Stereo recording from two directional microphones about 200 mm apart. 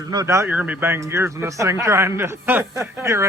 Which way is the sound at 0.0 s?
20° right (ahead or behind).